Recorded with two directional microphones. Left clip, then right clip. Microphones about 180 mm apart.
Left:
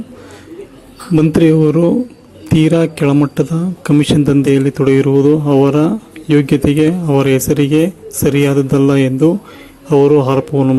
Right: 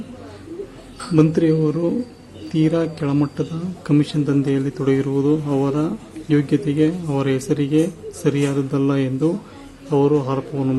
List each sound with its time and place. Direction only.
1.1 s speech: 40° left (ahead or behind)